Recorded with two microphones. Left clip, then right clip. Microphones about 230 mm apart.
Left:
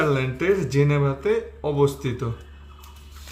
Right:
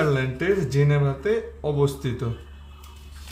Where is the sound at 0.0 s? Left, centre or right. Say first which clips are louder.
Left 1 dB; centre.